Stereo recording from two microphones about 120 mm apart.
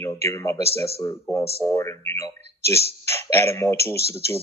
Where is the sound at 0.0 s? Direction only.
25° left (ahead or behind).